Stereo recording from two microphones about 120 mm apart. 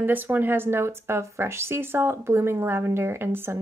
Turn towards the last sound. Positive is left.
turn(degrees=-20)  # may be behind; listen again after turning